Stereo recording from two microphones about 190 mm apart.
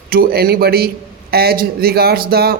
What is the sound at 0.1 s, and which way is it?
Speech, 55° right (ahead or behind).